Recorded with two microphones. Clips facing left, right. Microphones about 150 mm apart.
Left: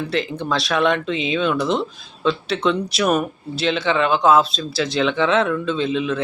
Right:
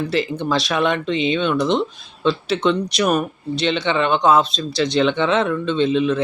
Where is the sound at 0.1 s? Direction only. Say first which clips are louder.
Right 2 dB; centre (ahead or behind).